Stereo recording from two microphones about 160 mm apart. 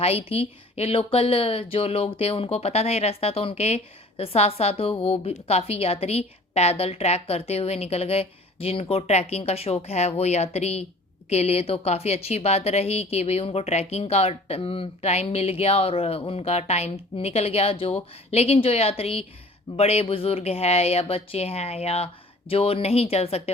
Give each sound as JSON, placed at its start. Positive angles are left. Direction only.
{"t": 0.0, "sound": "speech", "side_deg": 40}